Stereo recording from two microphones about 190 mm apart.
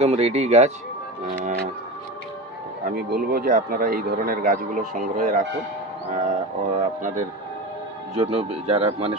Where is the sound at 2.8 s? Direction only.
50° right (ahead or behind).